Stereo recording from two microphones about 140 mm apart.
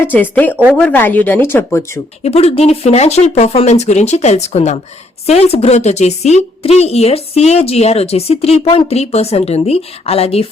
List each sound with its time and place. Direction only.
0.0 s speech: 10° left (ahead or behind)
2.2 s a woman's voice: 50° left (ahead or behind)